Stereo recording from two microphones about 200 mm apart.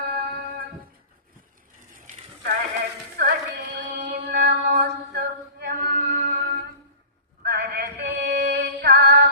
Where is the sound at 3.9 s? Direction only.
40° right (ahead or behind).